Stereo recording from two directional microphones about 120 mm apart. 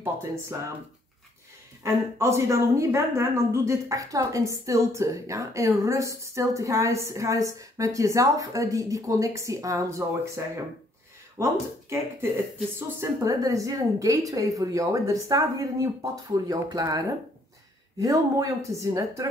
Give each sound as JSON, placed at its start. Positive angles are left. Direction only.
{"t": 0.0, "sound": "a woman's voice", "side_deg": -20}
{"t": 1.8, "sound": "a woman's voice", "side_deg": -25}